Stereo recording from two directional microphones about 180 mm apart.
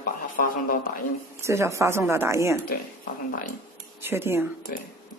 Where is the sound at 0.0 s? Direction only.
50° left (ahead or behind).